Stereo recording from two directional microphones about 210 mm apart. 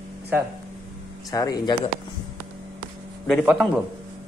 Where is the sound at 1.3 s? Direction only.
15° left (ahead or behind).